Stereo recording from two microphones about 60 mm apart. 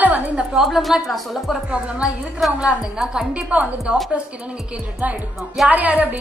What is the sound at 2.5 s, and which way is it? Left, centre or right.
Speech, centre.